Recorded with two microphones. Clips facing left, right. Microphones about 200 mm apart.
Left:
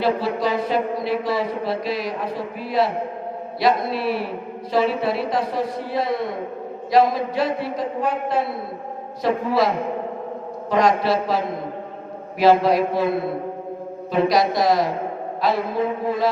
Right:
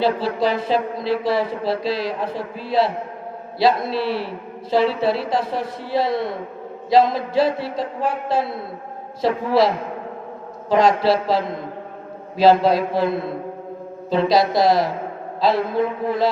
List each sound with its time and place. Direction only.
0.0 s a man's voice: 30° right (ahead or behind)
5.4 s mantra: centre (ahead or behind)
5.9 s a man's voice: 30° right (ahead or behind)
10.7 s a man's voice: 30° right (ahead or behind)
12.9 s mantra: centre (ahead or behind)
14.1 s a man's voice: 25° right (ahead or behind)